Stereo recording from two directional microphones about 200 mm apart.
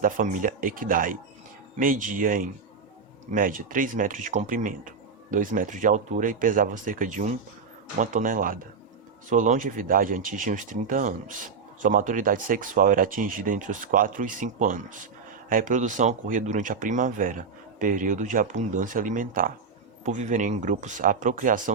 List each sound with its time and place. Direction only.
0.0 s speech: 40° right (ahead or behind)